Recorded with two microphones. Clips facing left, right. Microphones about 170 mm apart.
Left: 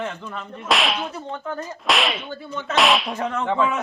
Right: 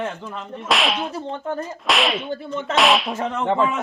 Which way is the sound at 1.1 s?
25° right (ahead or behind).